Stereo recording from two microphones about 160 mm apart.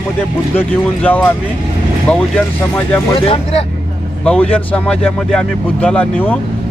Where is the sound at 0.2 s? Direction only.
10° left (ahead or behind).